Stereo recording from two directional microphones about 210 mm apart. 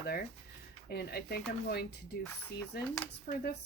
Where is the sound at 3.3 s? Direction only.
35° left (ahead or behind).